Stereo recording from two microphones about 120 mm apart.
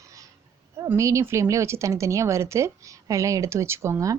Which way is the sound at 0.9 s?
25° right (ahead or behind).